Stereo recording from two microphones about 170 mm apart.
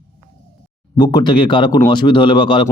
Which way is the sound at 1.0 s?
25° left (ahead or behind).